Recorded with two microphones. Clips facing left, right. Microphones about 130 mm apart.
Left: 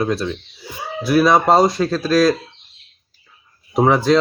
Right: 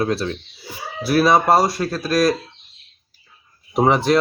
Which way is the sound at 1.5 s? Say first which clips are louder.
Left 2 dB; 20° left (ahead or behind).